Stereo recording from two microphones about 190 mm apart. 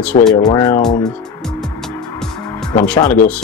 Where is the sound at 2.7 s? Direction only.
10° left (ahead or behind).